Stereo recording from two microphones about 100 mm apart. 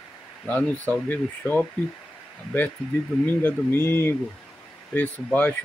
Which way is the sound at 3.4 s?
20° left (ahead or behind).